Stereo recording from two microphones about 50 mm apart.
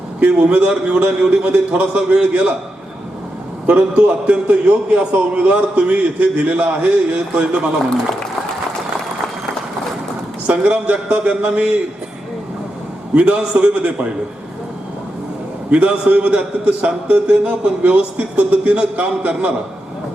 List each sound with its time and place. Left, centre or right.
0.2 s a man's voice: right
3.7 s a man's voice: right
10.6 s a man's voice: right
13.1 s a man's voice: right
15.7 s a man's voice: right